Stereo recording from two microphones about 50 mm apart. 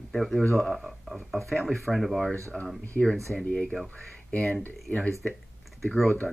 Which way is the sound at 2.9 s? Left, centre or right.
Centre.